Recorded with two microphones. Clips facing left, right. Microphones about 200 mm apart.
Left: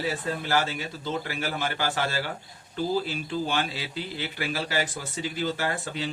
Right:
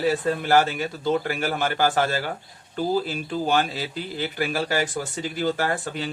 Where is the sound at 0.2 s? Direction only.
55° right (ahead or behind).